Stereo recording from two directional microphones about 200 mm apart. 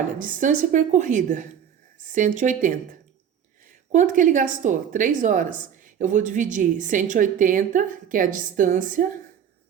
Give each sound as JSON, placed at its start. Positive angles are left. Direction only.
{"t": 0.2, "sound": "a woman's voice", "side_deg": -40}
{"t": 3.9, "sound": "a woman's voice", "side_deg": -40}